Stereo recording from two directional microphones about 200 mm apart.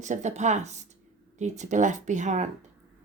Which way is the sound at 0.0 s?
35° right (ahead or behind).